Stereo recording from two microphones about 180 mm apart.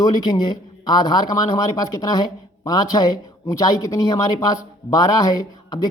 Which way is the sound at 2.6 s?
20° left (ahead or behind).